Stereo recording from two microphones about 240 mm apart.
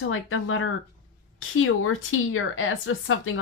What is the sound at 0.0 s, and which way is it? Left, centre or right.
Speech, left.